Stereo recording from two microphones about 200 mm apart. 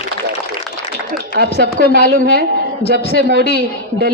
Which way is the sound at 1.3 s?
55° right (ahead or behind).